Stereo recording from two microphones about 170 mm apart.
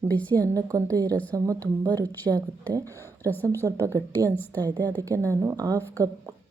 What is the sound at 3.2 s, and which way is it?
A woman's voice, 10° left (ahead or behind).